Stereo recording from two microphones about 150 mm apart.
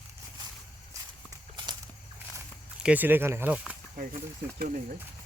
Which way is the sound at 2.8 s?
10° right (ahead or behind).